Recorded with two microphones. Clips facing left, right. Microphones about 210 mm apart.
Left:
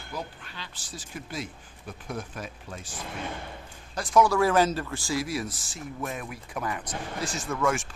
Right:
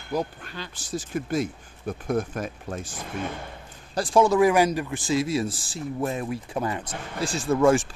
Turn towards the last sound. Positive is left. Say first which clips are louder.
# right 8 dB
turn(degrees=-35)  # may be behind; listen again after turning